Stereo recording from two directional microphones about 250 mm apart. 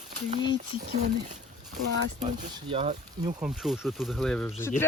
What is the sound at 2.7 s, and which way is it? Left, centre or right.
Speech, right.